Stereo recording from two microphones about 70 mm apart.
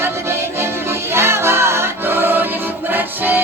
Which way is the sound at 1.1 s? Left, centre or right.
Right.